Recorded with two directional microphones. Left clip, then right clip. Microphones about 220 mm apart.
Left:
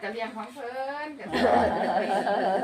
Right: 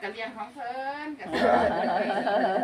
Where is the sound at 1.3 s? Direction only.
5° left (ahead or behind).